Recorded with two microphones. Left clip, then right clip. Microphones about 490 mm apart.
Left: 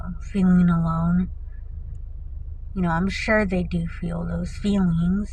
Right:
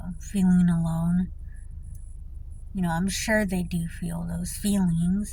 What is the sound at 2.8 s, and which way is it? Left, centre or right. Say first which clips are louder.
Speech: left 4 dB; right.